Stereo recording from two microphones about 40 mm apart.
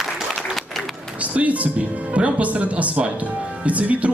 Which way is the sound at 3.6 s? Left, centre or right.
Right.